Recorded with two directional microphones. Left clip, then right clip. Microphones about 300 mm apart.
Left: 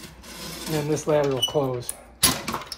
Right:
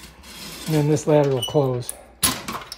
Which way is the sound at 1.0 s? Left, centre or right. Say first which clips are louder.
Right 2 dB; right.